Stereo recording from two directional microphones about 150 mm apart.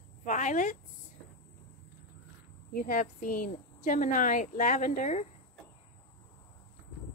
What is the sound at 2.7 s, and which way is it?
A woman's voice, 65° left (ahead or behind).